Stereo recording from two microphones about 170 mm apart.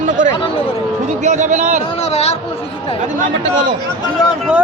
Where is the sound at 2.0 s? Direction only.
40° left (ahead or behind).